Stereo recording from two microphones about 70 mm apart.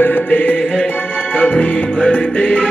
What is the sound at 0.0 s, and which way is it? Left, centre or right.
Music, left.